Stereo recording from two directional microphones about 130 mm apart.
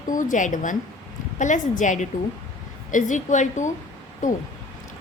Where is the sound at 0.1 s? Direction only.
90° left; by 3.7 s 70° left (ahead or behind).